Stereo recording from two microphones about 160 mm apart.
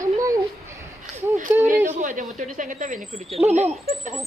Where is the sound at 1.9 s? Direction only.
50° right (ahead or behind).